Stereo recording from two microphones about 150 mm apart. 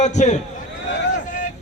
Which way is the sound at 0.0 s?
50° left (ahead or behind).